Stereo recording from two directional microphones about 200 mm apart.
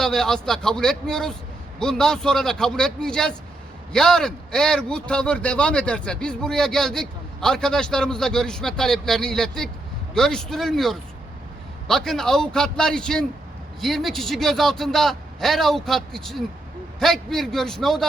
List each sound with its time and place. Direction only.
0.0 s speech: 5° left (ahead or behind)